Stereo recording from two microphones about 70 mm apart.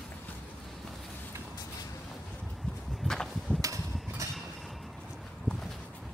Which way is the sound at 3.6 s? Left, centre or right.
Right.